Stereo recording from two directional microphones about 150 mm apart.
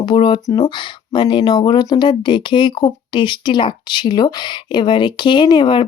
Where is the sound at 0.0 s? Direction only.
30° left (ahead or behind).